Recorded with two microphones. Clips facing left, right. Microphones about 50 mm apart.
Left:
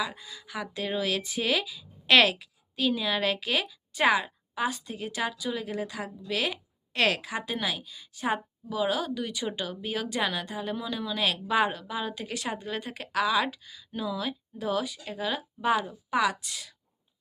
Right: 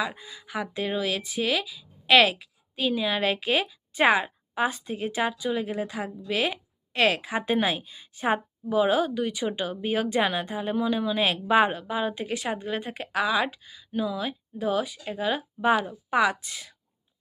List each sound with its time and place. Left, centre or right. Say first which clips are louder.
0.0 s a woman's voice: right 3 dB; right
0.9 s a woman's voice: even; centre; by 16.7 s right